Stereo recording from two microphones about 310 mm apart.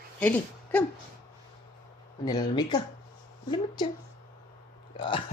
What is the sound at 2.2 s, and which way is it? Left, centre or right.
Speech, centre.